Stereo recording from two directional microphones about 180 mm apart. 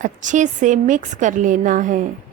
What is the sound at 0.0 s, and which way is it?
A woman's voice, 45° right (ahead or behind).